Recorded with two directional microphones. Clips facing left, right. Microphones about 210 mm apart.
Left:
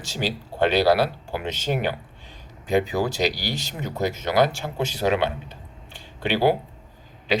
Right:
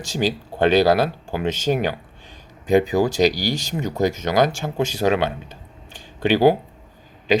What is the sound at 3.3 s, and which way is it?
Speech, 45° right (ahead or behind).